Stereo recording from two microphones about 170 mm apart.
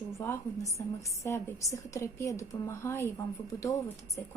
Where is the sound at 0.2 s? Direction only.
15° left (ahead or behind).